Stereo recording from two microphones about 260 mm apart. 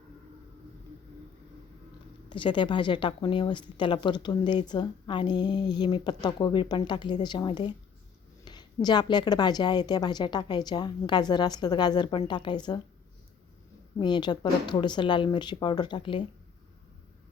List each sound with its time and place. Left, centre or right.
2.3 s a woman's voice: centre
14.0 s a woman's voice: centre